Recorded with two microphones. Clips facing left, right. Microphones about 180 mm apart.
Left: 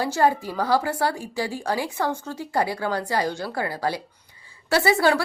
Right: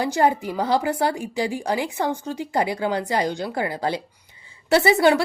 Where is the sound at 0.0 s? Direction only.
20° right (ahead or behind).